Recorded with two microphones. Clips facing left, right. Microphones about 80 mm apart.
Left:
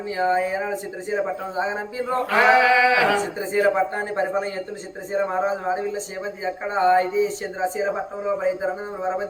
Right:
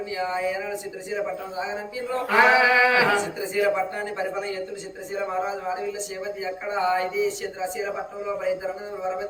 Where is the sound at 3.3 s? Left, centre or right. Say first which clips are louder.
Left 3 dB; left.